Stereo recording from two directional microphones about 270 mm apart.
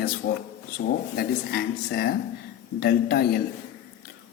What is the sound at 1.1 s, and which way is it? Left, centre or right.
Speech, left.